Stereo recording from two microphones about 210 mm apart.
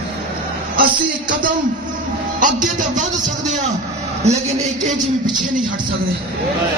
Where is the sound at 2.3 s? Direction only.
40° right (ahead or behind).